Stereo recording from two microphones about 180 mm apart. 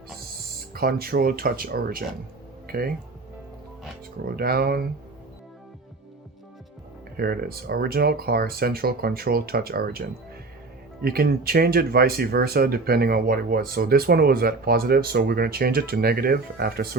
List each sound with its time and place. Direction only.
0.7 s speech: 55° right (ahead or behind)
4.3 s speech: 55° right (ahead or behind)
7.2 s speech: 60° right (ahead or behind)
11.0 s speech: 60° right (ahead or behind)